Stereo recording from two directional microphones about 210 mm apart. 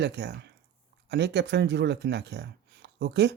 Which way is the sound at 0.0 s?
55° right (ahead or behind).